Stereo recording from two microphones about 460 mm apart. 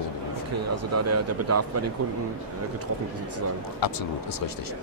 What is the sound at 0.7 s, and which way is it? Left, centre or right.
Speech, right.